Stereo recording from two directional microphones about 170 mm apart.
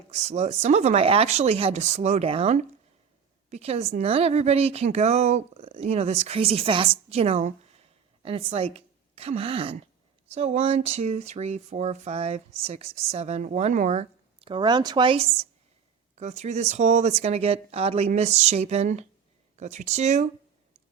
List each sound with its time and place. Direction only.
0.1 s a woman's voice: 40° right (ahead or behind)